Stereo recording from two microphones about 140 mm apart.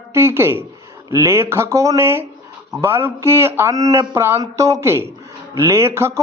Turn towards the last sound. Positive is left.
turn(degrees=-20)  # may be behind; listen again after turning